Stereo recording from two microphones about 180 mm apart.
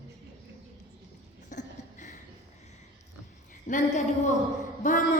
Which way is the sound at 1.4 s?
45° left (ahead or behind).